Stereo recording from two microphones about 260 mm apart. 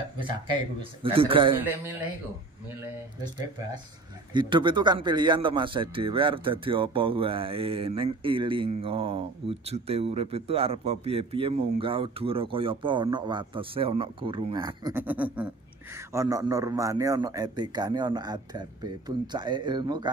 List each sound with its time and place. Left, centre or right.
0.2 s a man's voice: centre
4.3 s a man's voice: centre